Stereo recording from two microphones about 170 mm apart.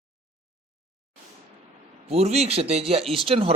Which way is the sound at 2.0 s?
40° right (ahead or behind).